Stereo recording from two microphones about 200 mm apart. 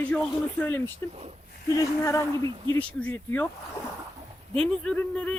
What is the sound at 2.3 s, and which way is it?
Speech, 25° right (ahead or behind).